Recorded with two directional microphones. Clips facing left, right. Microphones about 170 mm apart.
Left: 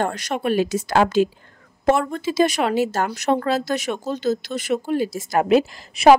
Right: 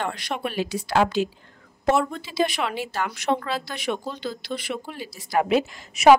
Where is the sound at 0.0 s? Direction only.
45° left (ahead or behind).